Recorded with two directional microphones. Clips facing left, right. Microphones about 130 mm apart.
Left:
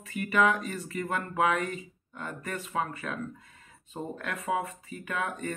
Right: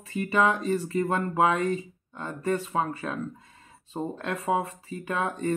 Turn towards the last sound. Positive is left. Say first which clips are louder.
# right 6 dB
turn(degrees=-30)  # may be behind; listen again after turning